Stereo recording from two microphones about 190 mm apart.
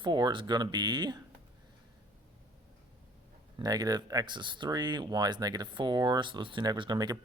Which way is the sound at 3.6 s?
20° right (ahead or behind).